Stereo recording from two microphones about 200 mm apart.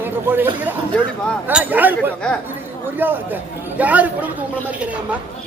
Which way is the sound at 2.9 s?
10° right (ahead or behind).